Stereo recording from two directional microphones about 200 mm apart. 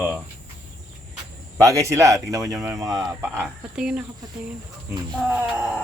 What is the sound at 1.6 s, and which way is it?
Speech, 15° right (ahead or behind).